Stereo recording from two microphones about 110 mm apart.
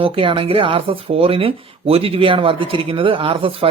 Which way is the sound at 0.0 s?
55° right (ahead or behind).